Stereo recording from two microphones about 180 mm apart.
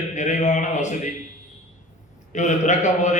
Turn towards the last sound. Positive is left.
turn(degrees=40)  # may be behind; listen again after turning